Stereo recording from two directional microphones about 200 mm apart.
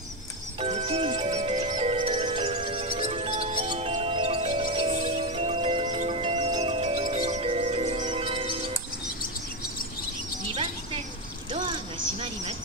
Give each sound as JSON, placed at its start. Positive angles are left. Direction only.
{"t": 0.6, "sound": "music", "side_deg": -30}